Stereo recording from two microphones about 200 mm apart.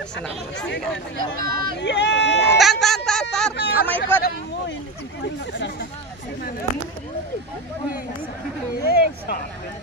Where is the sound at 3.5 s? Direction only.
55° left (ahead or behind).